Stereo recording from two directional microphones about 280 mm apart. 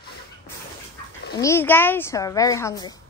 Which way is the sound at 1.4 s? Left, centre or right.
Centre.